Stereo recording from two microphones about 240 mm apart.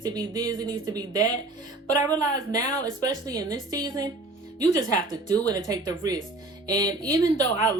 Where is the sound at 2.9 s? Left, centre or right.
Centre.